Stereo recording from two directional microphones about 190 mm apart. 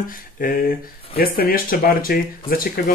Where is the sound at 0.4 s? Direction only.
50° left (ahead or behind).